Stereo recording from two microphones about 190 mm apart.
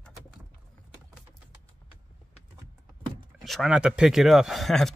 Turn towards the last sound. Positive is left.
turn(degrees=0)  # may be behind; listen again after turning